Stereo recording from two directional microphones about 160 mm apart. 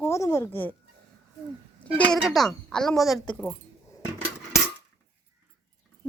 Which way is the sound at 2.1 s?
Centre (ahead or behind).